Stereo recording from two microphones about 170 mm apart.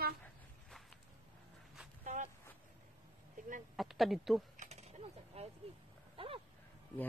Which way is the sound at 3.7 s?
Centre (ahead or behind).